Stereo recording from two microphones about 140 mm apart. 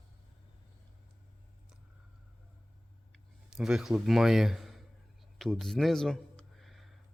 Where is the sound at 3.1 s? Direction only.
5° right (ahead or behind).